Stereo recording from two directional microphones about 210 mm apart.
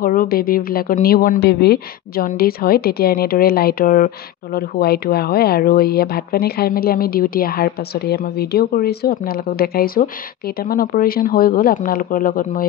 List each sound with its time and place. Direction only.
0.0 s speech: 45° left (ahead or behind)